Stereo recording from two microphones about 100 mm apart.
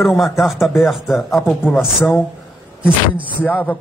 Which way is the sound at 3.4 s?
15° left (ahead or behind).